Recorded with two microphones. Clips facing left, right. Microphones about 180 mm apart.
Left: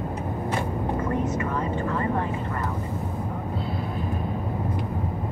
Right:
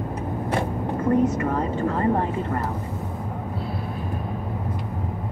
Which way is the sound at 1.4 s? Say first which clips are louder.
Right 3 dB; 40° right (ahead or behind).